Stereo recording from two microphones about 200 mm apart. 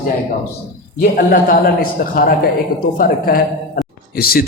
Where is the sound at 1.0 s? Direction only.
40° left (ahead or behind).